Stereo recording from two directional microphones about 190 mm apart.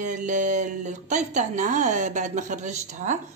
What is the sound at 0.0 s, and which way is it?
Speech, 40° right (ahead or behind).